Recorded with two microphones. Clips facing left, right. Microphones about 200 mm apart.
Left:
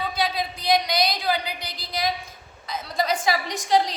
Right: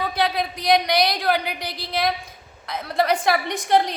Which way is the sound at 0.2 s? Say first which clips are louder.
Right 4 dB; 60° right (ahead or behind).